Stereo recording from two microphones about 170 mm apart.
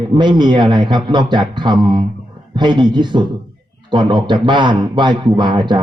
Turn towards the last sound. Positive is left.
turn(degrees=-25)  # may be behind; listen again after turning